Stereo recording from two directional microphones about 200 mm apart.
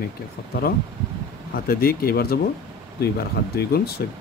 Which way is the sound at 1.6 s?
50° left (ahead or behind).